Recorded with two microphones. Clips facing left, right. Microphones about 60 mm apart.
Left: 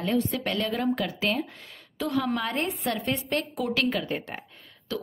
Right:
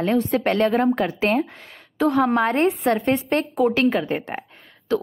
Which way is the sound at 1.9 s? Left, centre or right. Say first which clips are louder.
Right 9 dB; right.